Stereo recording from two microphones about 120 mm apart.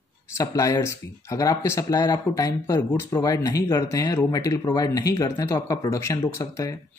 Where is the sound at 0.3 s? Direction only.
25° left (ahead or behind).